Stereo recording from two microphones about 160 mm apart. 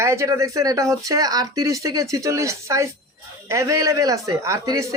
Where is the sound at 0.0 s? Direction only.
20° right (ahead or behind).